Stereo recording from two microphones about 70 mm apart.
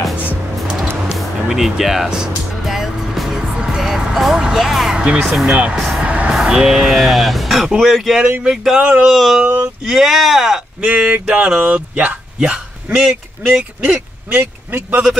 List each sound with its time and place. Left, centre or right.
1.1 s music: centre
6.3 s speech: centre
8.5 s speech: centre
9.1 s speech: centre
10.8 s speech: right
12.4 s a sound: centre
13.5 s speech: centre